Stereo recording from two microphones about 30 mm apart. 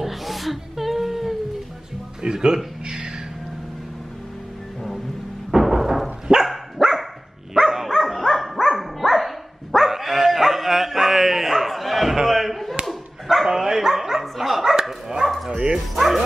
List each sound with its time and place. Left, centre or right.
0.0 s a sound: centre
2.3 s speech: right
5.6 s a sound: centre
6.3 s dog: right
6.8 s dog: centre
8.0 s dog: centre
12.3 s a sound: centre
12.8 s dog: centre
13.5 s dog: centre
15.2 s bow-wow: centre